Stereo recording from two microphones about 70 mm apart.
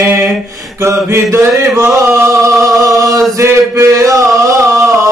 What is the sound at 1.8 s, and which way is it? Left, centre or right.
Chant, right.